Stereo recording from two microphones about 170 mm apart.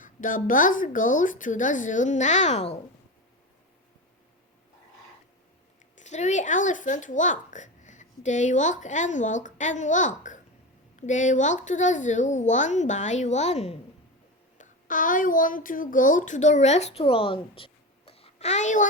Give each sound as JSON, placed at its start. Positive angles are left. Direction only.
{"t": 0.0, "sound": "a child's voice", "side_deg": 50}
{"t": 6.0, "sound": "a child's voice", "side_deg": 45}
{"t": 14.6, "sound": "a child's voice", "side_deg": 50}